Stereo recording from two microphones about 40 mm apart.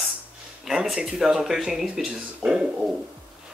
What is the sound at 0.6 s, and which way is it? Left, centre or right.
Speech, centre.